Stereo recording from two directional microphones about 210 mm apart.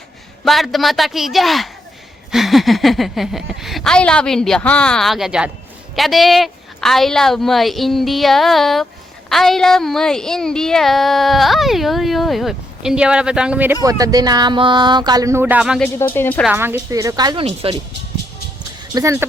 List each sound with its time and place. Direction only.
0.4 s a woman's voice: centre (ahead or behind)
16.1 s speech: 10° left (ahead or behind)
16.5 s speech: 10° right (ahead or behind); by 17.7 s 30° right (ahead or behind)
18.9 s speech: 15° right (ahead or behind)